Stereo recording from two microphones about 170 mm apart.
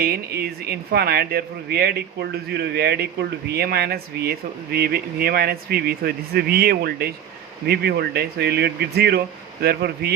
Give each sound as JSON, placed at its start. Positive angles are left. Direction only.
{"t": 0.0, "sound": "speech", "side_deg": -65}